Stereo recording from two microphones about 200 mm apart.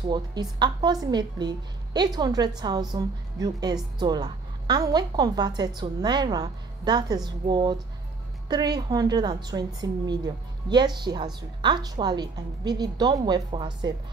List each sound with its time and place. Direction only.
0.1 s a woman's voice: 20° right (ahead or behind)